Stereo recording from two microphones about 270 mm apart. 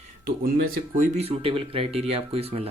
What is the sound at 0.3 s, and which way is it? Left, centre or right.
Speech, right.